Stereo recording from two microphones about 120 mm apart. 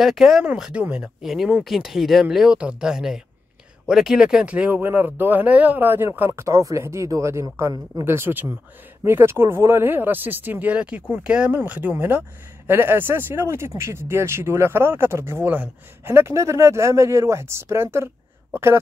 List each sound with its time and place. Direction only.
0.0 s speech: 5° right (ahead or behind); by 18.8 s 20° right (ahead or behind)